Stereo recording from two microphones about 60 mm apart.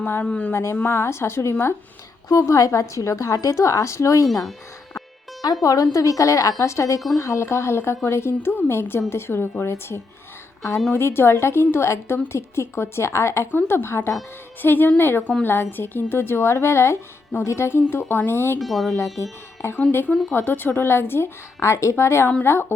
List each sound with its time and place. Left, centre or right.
0.0 s speech: left
0.5 s a woman's voice: left
2.5 s a woman's voice: left
4.9 s music: left
5.6 s a woman's voice: left
13.5 s a woman's voice: left
18.6 s speech: centre
18.9 s a woman's voice: left
20.3 s a woman's voice: left
21.6 s a woman's voice: left